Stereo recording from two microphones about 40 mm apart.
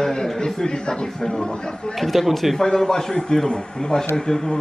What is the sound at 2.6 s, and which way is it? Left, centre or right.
A man's voice, centre.